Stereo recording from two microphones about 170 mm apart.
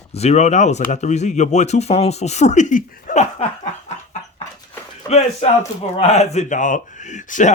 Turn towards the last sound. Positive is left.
turn(degrees=45)  # may be behind; listen again after turning